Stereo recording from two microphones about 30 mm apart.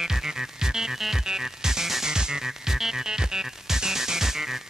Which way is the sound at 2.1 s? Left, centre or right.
Right.